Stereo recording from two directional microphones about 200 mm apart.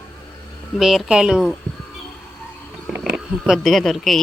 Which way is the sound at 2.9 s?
Centre (ahead or behind).